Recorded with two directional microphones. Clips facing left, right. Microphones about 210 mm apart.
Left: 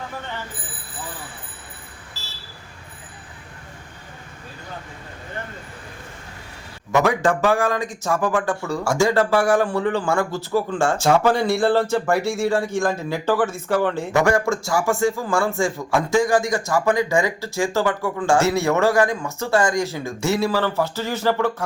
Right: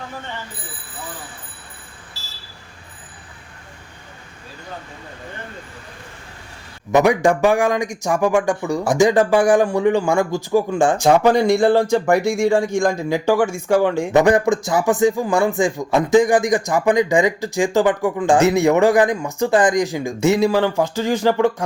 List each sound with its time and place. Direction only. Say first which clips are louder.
6.9 s a man's voice: right 4 dB; 15° right (ahead or behind)